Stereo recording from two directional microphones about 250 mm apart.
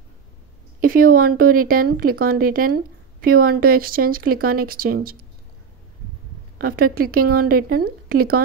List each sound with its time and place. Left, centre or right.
0.7 s a sound: right
1.1 s speech: right
6.6 s speech: right